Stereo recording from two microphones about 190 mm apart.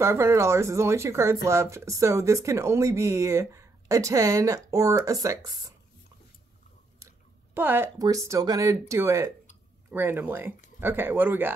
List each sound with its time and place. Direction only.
0.0 s speech: 15° right (ahead or behind)
7.0 s speech: 10° right (ahead or behind)